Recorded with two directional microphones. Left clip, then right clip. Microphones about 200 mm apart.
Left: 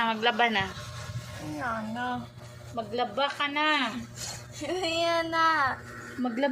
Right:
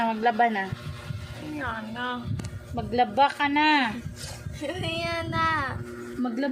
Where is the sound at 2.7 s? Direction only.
30° right (ahead or behind).